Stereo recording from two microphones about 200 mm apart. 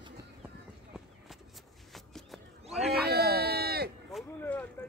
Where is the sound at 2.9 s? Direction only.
50° right (ahead or behind).